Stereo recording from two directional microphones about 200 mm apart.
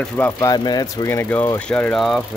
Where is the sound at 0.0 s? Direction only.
10° left (ahead or behind).